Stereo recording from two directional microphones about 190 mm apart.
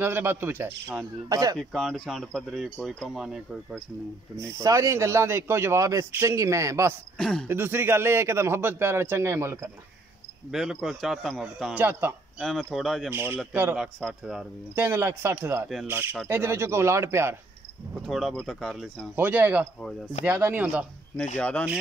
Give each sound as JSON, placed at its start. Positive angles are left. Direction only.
{"t": 0.0, "sound": "speech", "side_deg": -10}
{"t": 1.6, "sound": "speech", "side_deg": 0}
{"t": 4.4, "sound": "speech", "side_deg": -15}
{"t": 7.2, "sound": "speech", "side_deg": 5}
{"t": 7.4, "sound": "speech", "side_deg": -10}
{"t": 10.5, "sound": "speech", "side_deg": 0}
{"t": 18.0, "sound": "speech", "side_deg": 0}
{"t": 21.4, "sound": "speech", "side_deg": 5}